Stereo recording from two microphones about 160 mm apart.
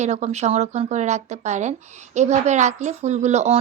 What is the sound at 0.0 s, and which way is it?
A woman's voice, 45° right (ahead or behind).